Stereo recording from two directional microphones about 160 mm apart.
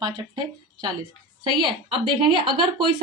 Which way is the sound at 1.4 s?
30° right (ahead or behind).